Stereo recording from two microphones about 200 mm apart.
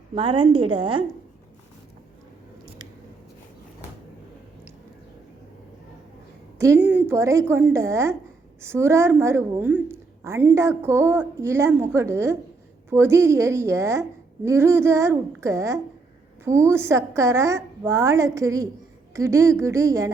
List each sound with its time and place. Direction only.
0.1 s a woman's voice: 25° right (ahead or behind)
6.6 s a woman's voice: 10° right (ahead or behind)